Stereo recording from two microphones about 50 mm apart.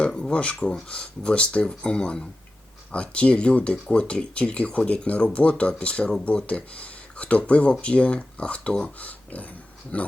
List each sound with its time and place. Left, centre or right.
0.2 s speech: left
9.0 s speech: left